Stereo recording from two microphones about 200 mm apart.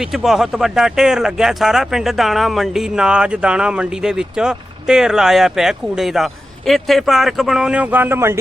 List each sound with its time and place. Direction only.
0.0 s speech: centre (ahead or behind)